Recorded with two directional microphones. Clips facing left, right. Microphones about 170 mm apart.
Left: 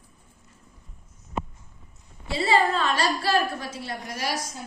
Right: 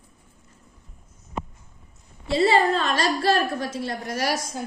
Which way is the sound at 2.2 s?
40° right (ahead or behind).